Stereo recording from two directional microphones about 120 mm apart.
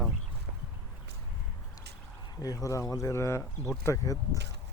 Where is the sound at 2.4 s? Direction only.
30° left (ahead or behind).